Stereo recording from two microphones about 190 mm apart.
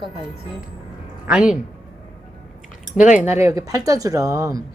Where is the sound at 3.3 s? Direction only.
15° right (ahead or behind).